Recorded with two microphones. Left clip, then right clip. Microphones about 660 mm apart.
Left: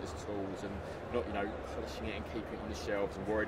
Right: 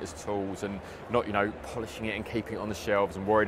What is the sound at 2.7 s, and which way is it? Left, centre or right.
Speech, right.